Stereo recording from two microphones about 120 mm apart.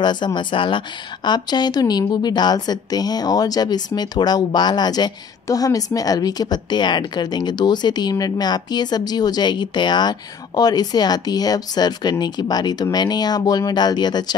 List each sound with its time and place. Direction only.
0.0 s a woman's voice: 40° left (ahead or behind)